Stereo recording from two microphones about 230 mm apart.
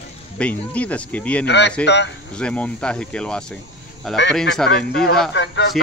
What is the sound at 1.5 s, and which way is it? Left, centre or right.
Speech, left.